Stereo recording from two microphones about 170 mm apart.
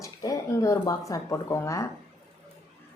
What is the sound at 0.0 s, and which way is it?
Speech, 20° left (ahead or behind).